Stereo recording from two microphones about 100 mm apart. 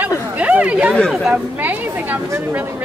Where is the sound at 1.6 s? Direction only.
15° right (ahead or behind).